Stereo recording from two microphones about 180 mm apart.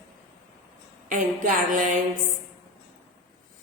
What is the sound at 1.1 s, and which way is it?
Music, 45° right (ahead or behind).